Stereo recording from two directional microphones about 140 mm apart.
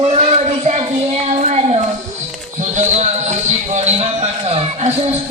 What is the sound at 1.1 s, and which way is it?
Child singing, 50° right (ahead or behind).